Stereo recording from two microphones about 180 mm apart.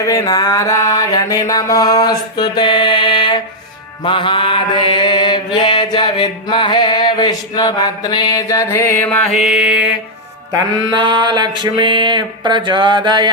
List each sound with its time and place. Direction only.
0.0 s mantra: 20° left (ahead or behind)
9.4 s mantra: 5° right (ahead or behind)
11.0 s a sound: 25° right (ahead or behind)